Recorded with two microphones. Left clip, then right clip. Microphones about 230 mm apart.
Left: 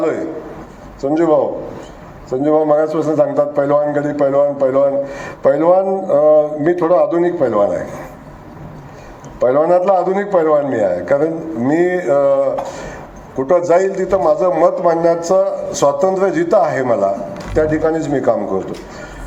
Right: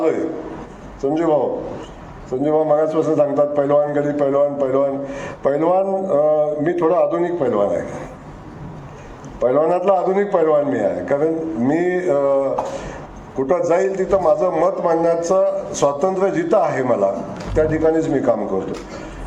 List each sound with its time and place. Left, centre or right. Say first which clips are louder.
1.0 s a man's voice: left 4 dB; left
2.4 s a man's voice: left 3 dB; left
9.4 s a man's voice: left 4 dB; left